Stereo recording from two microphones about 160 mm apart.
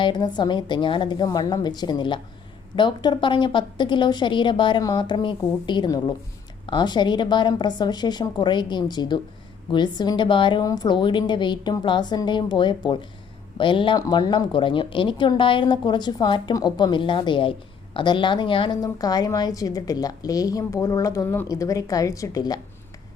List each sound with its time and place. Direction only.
0.0 s a woman's voice: 30° left (ahead or behind)